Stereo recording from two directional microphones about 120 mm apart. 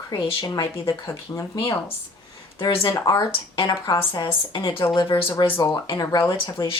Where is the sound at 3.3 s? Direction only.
45° left (ahead or behind).